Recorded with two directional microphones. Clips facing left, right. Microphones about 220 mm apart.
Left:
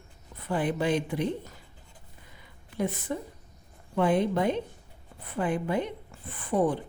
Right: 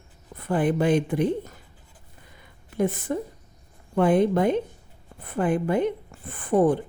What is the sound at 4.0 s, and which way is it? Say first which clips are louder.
A woman's voice: right 5 dB; 50° right (ahead or behind).